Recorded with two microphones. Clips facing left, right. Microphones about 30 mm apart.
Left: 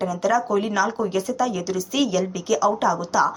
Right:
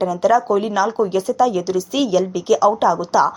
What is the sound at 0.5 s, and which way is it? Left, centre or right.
Speech, centre.